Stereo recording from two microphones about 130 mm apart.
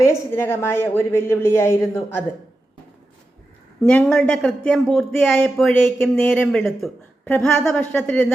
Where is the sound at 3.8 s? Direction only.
5° left (ahead or behind).